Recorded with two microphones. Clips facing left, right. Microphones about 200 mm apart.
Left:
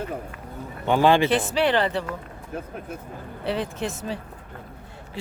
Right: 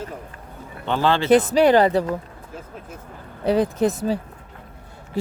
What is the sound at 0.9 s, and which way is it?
Speech, 15° left (ahead or behind).